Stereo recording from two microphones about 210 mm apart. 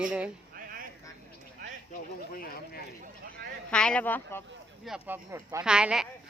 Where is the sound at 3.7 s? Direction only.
5° left (ahead or behind).